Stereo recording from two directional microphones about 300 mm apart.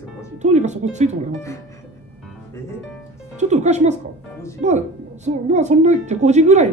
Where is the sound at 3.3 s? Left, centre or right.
Right.